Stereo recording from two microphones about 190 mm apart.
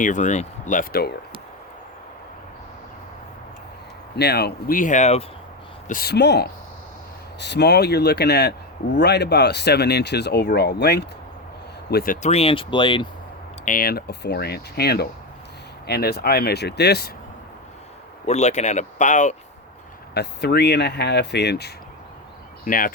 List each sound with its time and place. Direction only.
0.0 s speech: 40° left (ahead or behind)
4.2 s speech: 60° left (ahead or behind); by 5.2 s 35° left (ahead or behind)
5.9 s speech: 55° left (ahead or behind); by 13.1 s 25° left (ahead or behind)
13.7 s speech: 50° left (ahead or behind)
18.3 s speech: 35° left (ahead or behind)
20.1 s speech: 60° left (ahead or behind)
22.6 s speech: 45° left (ahead or behind)